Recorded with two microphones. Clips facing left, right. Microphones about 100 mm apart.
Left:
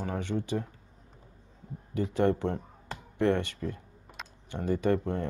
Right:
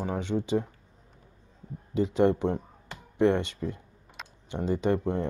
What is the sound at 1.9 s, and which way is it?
Speech, 20° right (ahead or behind).